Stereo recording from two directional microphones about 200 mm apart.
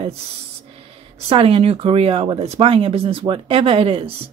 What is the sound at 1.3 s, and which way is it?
Speech, 30° right (ahead or behind).